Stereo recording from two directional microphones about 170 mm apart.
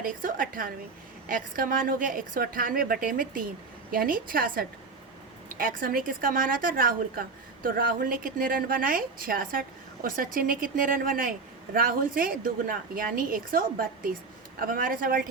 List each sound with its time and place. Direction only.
0.0 s a woman's voice: 55° right (ahead or behind)